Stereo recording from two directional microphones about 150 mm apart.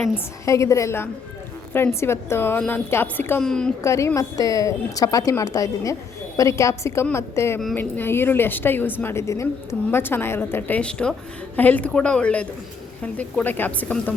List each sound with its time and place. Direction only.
0.4 s a woman's voice: 20° left (ahead or behind); by 3.7 s 5° left (ahead or behind)
3.8 s a woman's voice: 20° left (ahead or behind)